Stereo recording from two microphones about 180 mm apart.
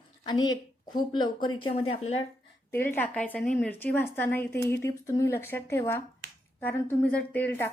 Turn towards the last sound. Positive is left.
turn(degrees=10)  # may be behind; listen again after turning